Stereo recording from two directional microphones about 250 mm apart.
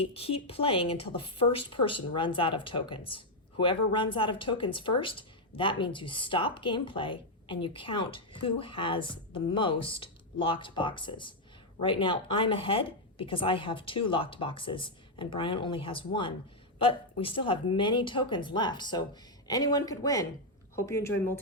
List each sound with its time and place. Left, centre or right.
0.0 s speech: left